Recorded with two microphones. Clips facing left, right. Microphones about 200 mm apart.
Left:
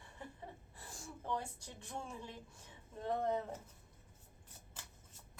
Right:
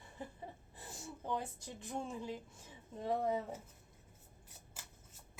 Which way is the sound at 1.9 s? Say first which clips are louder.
Right 5 dB; 20° right (ahead or behind).